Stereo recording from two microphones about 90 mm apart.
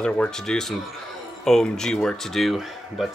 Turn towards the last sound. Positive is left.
turn(degrees=0)  # may be behind; listen again after turning